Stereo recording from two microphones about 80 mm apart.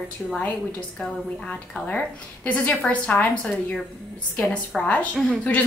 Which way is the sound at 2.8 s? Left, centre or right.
Centre.